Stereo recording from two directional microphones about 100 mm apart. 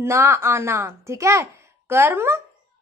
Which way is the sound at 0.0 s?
25° right (ahead or behind).